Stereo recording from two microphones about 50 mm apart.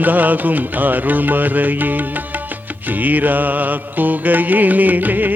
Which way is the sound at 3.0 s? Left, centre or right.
Right.